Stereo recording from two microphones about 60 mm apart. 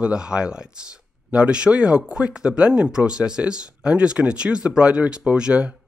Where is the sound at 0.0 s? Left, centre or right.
Centre.